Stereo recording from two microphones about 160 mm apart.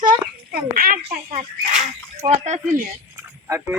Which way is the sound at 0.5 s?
65° right (ahead or behind).